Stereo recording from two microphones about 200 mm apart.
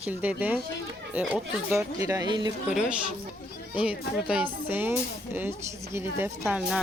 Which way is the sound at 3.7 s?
5° right (ahead or behind).